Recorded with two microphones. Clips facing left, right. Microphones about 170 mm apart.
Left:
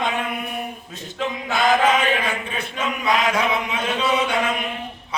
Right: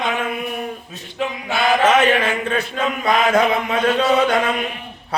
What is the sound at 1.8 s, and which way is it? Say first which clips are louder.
Speech: right 4 dB; 90° right.